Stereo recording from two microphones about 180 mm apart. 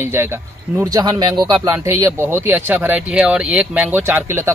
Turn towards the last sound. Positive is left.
turn(degrees=-15)  # may be behind; listen again after turning